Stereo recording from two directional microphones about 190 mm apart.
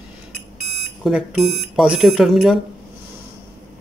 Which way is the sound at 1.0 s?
Centre (ahead or behind).